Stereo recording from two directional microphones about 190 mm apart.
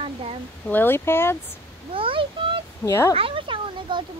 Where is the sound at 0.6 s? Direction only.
10° left (ahead or behind).